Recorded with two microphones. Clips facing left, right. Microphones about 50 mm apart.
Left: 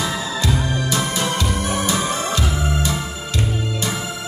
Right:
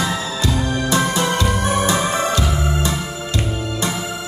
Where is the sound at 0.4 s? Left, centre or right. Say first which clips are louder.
Right 1 dB; right.